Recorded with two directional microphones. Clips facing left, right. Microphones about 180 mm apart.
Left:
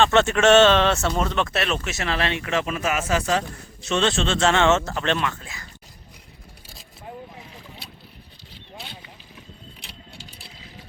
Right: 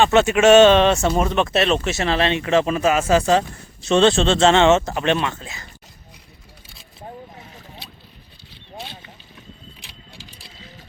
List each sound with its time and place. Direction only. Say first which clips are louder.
0.0 s speech: right 3 dB; 10° right (ahead or behind)